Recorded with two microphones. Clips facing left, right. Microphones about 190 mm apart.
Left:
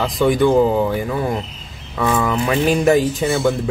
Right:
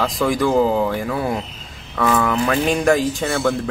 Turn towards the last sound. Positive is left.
turn(degrees=5)  # may be behind; listen again after turning